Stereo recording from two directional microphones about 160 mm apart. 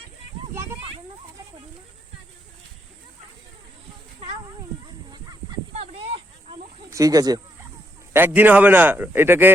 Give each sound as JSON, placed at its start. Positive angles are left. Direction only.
{"t": 5.1, "sound": "goose", "side_deg": -25}
{"t": 5.7, "sound": "snake", "side_deg": -40}
{"t": 6.9, "sound": "speech", "side_deg": -20}
{"t": 8.1, "sound": "a man's voice", "side_deg": -10}